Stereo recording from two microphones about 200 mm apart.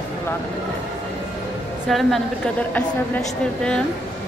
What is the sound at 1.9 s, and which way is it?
Speech, centre (ahead or behind).